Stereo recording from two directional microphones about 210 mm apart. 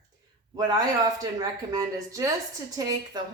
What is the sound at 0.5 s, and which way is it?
A woman's voice, 20° right (ahead or behind).